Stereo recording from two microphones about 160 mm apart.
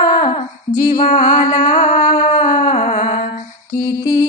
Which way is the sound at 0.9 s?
50° left (ahead or behind).